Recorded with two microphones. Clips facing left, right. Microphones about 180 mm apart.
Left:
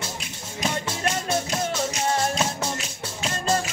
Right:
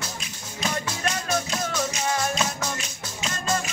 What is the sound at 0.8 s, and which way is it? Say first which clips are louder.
Music: left 2 dB; 25° left (ahead or behind).